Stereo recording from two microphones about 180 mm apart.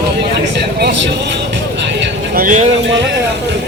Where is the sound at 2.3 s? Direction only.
50° right (ahead or behind).